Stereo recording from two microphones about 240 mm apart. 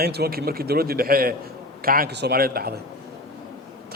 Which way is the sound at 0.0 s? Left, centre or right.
Right.